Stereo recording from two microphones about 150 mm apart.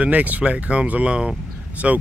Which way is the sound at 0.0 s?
10° right (ahead or behind).